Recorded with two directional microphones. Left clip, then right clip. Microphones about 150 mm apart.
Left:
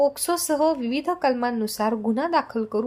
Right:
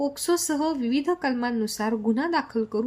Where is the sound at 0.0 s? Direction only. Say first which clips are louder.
Left 4 dB; 15° left (ahead or behind).